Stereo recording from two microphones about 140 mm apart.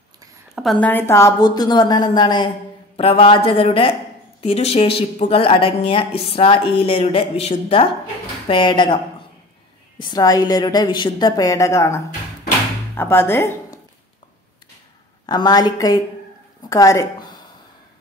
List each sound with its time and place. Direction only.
0.6 s a woman's voice: centre (ahead or behind)
0.8 s a woman's voice: 15° left (ahead or behind)
15.2 s a woman's voice: 30° left (ahead or behind)